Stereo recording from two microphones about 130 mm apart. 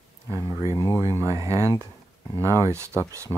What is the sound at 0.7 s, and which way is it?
Speech, 25° left (ahead or behind).